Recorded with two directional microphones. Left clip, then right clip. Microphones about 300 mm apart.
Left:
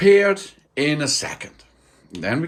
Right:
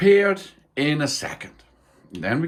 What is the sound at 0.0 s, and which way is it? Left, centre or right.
Speech, centre.